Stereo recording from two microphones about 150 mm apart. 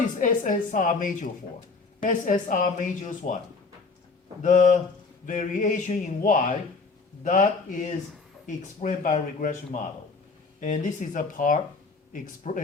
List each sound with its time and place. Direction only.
0.2 s speech: 60° left (ahead or behind)
4.4 s speech: 60° left (ahead or behind)